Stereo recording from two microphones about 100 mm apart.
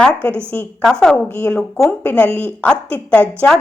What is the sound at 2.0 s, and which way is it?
A woman's voice, 15° left (ahead or behind).